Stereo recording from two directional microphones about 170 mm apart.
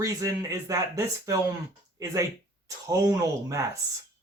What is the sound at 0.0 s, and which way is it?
Speech, 20° right (ahead or behind).